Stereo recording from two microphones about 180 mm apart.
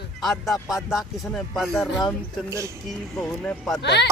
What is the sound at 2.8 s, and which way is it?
Speech, centre (ahead or behind).